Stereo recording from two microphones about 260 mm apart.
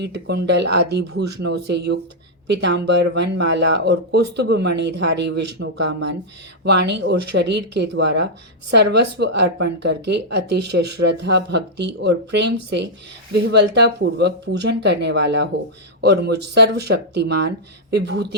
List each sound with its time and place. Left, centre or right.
0.0 s a woman's voice: right
6.7 s a woman's voice: right